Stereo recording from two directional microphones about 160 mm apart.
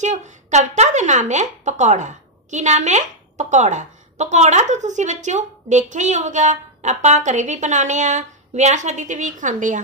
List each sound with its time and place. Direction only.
0.0 s a woman's voice: 45° right (ahead or behind)